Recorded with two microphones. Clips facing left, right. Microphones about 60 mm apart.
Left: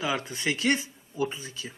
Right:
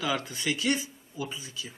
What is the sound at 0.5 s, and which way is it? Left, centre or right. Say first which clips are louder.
Speech: left 3 dB; left.